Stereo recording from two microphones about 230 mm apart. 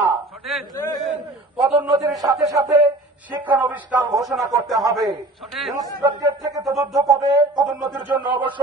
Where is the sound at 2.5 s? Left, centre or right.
Centre.